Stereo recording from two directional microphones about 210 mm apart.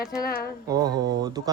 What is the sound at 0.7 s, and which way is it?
Speech, 20° right (ahead or behind).